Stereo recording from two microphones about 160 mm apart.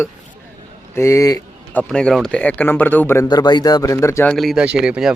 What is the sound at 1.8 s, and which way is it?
Speech, 5° left (ahead or behind).